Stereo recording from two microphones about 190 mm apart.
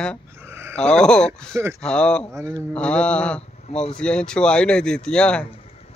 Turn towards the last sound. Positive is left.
turn(degrees=30)  # may be behind; listen again after turning